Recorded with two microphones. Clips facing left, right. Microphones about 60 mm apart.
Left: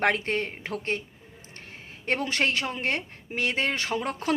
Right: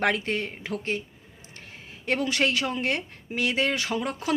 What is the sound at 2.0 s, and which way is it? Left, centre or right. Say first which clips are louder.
Speech: right 1 dB; left.